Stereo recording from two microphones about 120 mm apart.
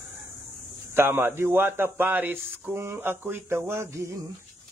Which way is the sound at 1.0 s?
20° right (ahead or behind).